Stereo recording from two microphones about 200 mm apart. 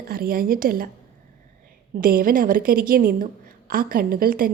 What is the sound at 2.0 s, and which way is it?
A woman's voice, 45° right (ahead or behind).